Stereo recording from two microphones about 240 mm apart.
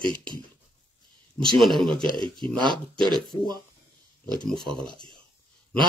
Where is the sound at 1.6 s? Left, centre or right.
Centre.